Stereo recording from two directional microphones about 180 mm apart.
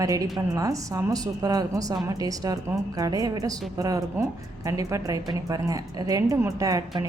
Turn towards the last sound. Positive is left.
turn(degrees=-20)  # may be behind; listen again after turning